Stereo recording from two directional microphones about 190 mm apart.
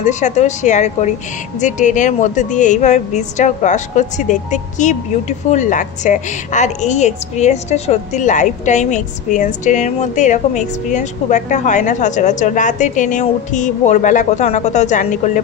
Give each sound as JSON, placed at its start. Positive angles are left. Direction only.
{"t": 0.0, "sound": "a woman's voice", "side_deg": 40}